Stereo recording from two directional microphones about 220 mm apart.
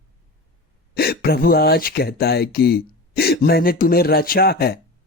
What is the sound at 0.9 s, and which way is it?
Speech, 45° left (ahead or behind).